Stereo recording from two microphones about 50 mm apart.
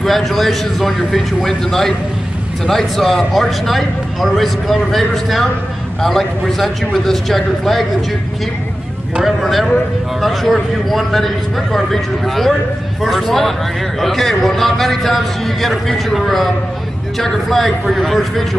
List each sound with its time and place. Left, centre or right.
0.0 s a man's voice: centre
9.2 s a man's voice: centre